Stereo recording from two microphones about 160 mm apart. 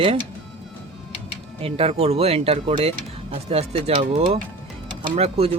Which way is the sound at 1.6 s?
40° right (ahead or behind).